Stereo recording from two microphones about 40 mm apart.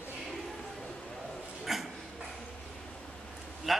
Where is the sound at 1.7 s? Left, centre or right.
Centre.